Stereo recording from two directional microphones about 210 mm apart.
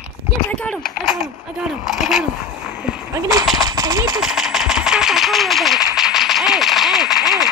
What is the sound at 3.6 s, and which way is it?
Speech, 20° right (ahead or behind).